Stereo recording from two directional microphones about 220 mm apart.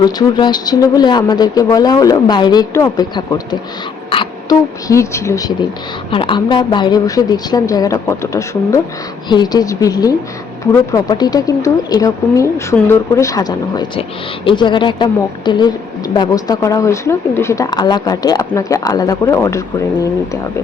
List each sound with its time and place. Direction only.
0.0 s a woman's voice: 20° left (ahead or behind)